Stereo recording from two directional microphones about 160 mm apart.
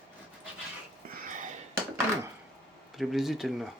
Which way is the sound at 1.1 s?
55° right (ahead or behind).